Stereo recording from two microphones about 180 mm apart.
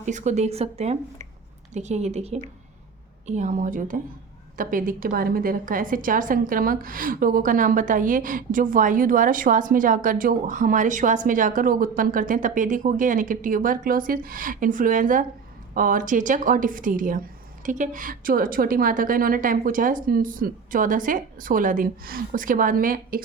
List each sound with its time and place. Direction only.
0.0 s a woman's voice: 40° right (ahead or behind)